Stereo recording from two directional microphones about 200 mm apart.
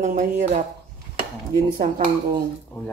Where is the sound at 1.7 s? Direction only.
45° right (ahead or behind).